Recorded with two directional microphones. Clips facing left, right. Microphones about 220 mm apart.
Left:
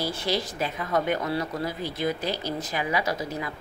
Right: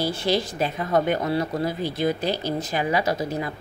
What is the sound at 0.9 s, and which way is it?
Speech, 25° right (ahead or behind).